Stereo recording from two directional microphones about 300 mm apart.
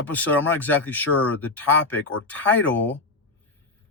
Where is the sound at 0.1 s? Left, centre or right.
Centre.